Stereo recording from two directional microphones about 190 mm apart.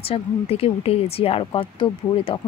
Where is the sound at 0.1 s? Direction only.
30° left (ahead or behind).